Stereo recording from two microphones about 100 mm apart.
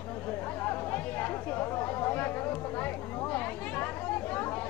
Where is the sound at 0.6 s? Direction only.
20° left (ahead or behind).